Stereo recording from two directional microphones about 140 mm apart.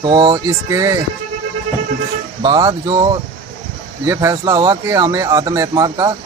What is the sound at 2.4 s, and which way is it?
Speech, 30° right (ahead or behind).